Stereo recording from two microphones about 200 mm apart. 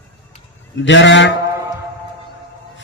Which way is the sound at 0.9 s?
65° left (ahead or behind).